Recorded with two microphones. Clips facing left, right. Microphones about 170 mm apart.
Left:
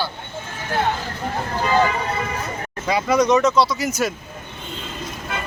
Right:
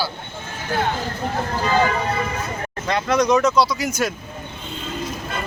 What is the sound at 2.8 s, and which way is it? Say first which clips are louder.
Speech: left 1 dB; 5° left (ahead or behind).